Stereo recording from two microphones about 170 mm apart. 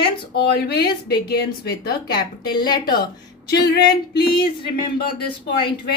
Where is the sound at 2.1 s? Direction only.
25° left (ahead or behind).